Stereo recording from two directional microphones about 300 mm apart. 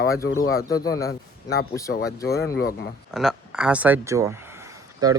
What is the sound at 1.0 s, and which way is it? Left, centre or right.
Speech, left.